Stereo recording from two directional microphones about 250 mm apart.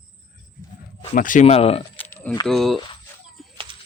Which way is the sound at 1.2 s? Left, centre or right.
Left.